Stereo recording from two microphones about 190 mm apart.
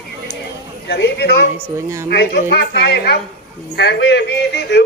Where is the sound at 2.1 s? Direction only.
55° left (ahead or behind).